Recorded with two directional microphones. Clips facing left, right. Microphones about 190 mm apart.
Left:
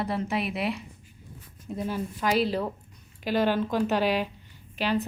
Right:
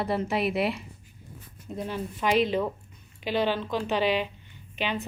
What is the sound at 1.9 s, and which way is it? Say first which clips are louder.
Speech: even; 5° left (ahead or behind).